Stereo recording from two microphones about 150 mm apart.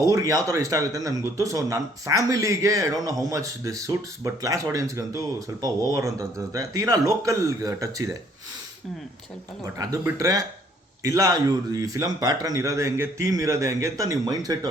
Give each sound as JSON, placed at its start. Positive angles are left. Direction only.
{"t": 0.0, "sound": "speech", "side_deg": -20}
{"t": 9.7, "sound": "speech", "side_deg": -20}